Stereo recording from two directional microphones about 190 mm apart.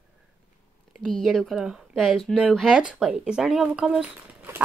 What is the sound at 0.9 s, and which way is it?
Speech, centre (ahead or behind).